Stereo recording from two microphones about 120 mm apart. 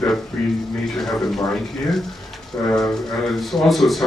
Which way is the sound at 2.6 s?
20° left (ahead or behind).